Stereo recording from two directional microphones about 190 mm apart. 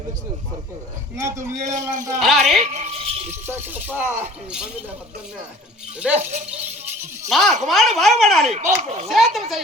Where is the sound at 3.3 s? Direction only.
10° right (ahead or behind).